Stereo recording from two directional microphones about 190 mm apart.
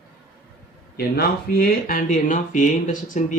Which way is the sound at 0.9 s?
50° left (ahead or behind).